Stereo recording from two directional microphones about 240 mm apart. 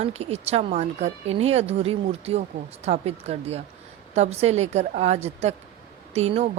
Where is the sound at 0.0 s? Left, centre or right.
Right.